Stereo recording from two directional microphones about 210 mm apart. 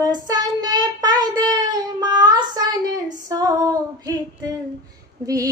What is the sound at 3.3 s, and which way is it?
Female singing, 15° right (ahead or behind).